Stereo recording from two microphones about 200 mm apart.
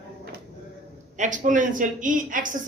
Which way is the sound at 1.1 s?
40° right (ahead or behind).